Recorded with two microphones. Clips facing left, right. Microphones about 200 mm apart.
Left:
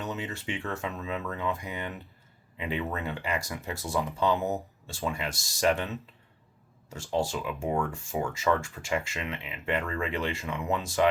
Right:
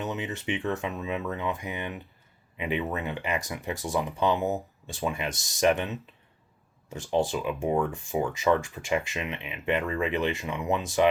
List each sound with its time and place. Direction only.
0.0 s speech: 20° right (ahead or behind)